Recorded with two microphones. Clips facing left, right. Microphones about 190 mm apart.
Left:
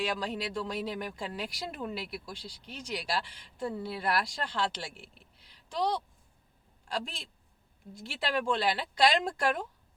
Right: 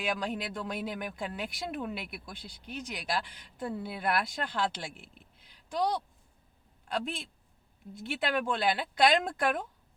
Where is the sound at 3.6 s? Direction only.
5° right (ahead or behind).